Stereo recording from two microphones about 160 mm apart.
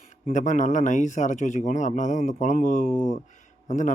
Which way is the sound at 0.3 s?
50° left (ahead or behind).